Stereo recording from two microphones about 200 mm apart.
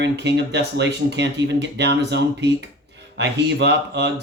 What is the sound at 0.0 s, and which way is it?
Speech, 60° right (ahead or behind).